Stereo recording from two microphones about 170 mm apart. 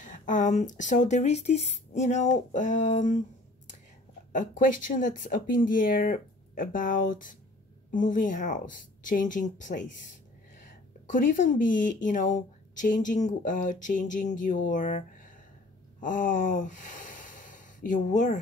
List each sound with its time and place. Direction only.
0.0 s a woman's voice: 50° left (ahead or behind)
4.3 s a woman's voice: 50° left (ahead or behind)
11.1 s a woman's voice: 50° left (ahead or behind)
16.0 s sigh: 50° left (ahead or behind)